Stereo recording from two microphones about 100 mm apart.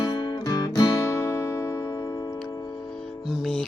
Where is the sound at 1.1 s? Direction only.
25° left (ahead or behind).